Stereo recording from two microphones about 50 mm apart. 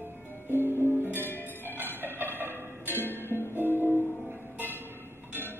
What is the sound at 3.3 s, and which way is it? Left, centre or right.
Music, left.